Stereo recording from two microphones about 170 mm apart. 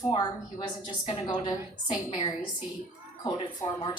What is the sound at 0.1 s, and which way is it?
A woman's voice, 30° left (ahead or behind).